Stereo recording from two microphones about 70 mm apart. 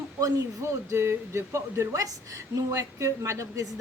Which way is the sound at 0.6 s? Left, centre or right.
Right.